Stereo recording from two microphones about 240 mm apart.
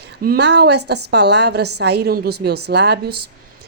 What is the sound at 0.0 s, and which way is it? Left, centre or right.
A woman's voice, right.